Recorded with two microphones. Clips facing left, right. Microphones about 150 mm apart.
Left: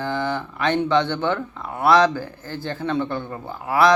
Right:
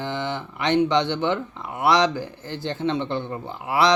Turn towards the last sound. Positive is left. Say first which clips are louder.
# left 3 dB
turn(degrees=-20)  # may be behind; listen again after turning